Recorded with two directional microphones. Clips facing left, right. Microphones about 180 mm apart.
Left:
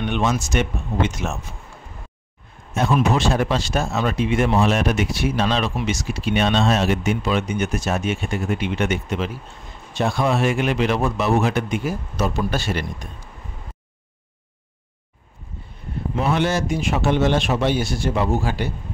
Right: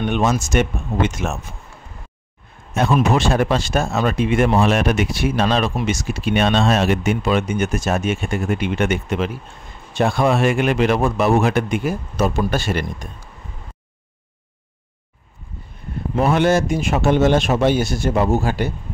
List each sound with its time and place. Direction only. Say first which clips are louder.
0.0 s speech: right 3 dB; 45° right (ahead or behind)
2.7 s speech: right 2 dB; 60° right (ahead or behind)
16.2 s speech: right 5 dB; 50° right (ahead or behind)